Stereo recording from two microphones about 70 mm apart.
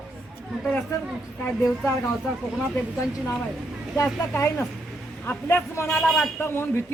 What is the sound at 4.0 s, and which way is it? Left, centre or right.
A man's voice, left.